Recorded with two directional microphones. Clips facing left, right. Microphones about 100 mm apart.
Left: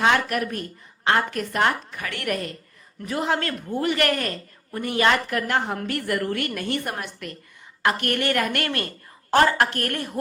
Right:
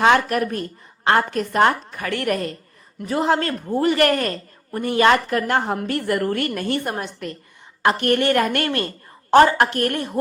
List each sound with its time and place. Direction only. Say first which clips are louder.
0.3 s a woman's voice: right 4 dB; 35° right (ahead or behind)